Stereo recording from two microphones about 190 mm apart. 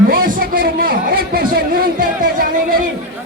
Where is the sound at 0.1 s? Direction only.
50° right (ahead or behind).